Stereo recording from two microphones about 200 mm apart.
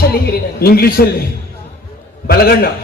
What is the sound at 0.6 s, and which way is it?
Speech, 50° left (ahead or behind).